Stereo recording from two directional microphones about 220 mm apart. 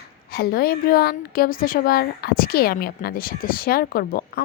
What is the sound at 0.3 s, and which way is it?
A woman's voice, 45° left (ahead or behind).